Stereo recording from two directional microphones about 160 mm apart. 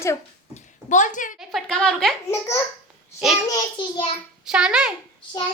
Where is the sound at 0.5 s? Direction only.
50° left (ahead or behind).